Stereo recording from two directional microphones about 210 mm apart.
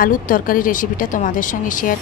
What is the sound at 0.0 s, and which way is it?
Speech, 40° left (ahead or behind).